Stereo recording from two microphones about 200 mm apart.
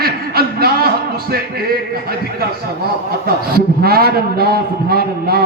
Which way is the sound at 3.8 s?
50° right (ahead or behind).